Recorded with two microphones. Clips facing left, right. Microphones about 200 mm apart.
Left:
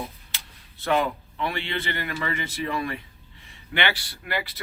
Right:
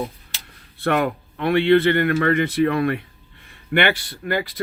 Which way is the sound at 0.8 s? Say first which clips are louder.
Right 3 dB; 60° right (ahead or behind).